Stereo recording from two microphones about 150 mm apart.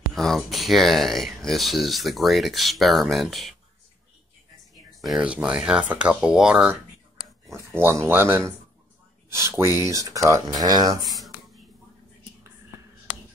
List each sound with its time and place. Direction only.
0.1 s speech: centre (ahead or behind)
5.0 s speech: 5° right (ahead or behind)
7.5 s speech: 15° right (ahead or behind)